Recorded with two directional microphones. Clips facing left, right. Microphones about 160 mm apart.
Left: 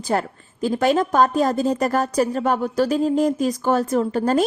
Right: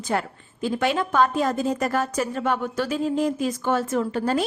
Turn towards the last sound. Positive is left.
turn(degrees=40)  # may be behind; listen again after turning